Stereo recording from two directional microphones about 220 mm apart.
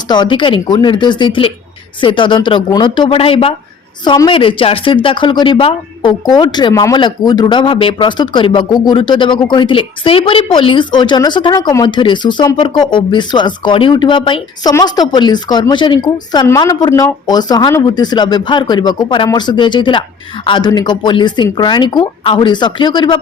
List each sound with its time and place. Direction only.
0.1 s speech: 20° left (ahead or behind)